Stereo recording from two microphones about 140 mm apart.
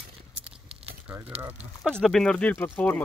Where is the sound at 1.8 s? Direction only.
Centre (ahead or behind).